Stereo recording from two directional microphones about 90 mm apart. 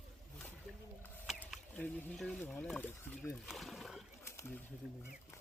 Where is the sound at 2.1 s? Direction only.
5° left (ahead or behind).